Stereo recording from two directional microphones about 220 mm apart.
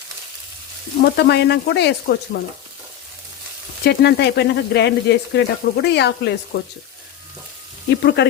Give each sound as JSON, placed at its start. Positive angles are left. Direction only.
{"t": 1.1, "sound": "speech", "side_deg": 50}
{"t": 3.8, "sound": "speech", "side_deg": 45}
{"t": 7.9, "sound": "speech", "side_deg": 50}